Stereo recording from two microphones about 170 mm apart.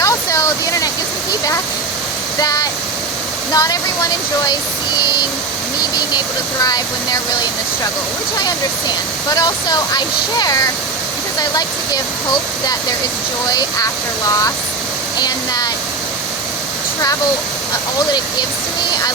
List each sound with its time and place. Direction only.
0.0 s waterfall: 20° left (ahead or behind)
2.4 s waterfall: 20° left (ahead or behind)
3.5 s speech: 20° left (ahead or behind)
6.1 s speech: 25° left (ahead or behind)
9.3 s speech: 25° left (ahead or behind)
13.5 s speech: 20° left (ahead or behind)